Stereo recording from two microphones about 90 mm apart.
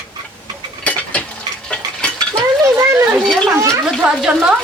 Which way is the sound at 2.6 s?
35° right (ahead or behind).